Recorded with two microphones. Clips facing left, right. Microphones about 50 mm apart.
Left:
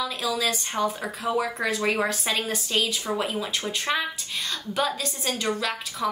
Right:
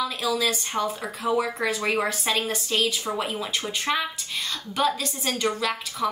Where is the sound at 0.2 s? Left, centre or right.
Centre.